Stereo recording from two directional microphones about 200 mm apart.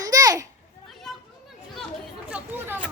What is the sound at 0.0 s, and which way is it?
Children playing, 20° right (ahead or behind).